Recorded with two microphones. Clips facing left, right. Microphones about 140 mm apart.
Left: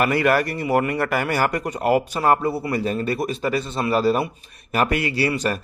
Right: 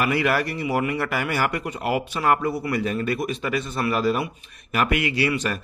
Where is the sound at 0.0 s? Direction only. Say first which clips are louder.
Left 3 dB; 45° left (ahead or behind).